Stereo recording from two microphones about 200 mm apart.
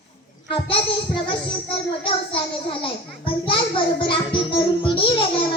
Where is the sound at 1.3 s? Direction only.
25° left (ahead or behind).